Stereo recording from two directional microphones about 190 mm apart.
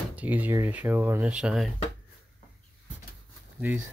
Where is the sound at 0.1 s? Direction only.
10° right (ahead or behind).